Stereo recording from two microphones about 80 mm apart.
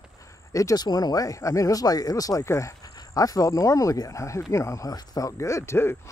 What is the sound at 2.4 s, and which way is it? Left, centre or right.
Speech, left.